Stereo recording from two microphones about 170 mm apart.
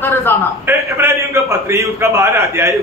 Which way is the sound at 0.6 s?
15° right (ahead or behind).